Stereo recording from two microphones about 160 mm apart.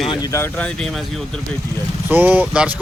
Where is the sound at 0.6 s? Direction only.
5° left (ahead or behind).